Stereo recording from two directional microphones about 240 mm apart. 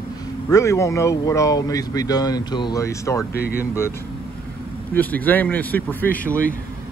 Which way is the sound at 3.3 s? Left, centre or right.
Left.